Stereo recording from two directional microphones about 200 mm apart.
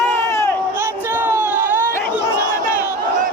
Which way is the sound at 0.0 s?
10° left (ahead or behind).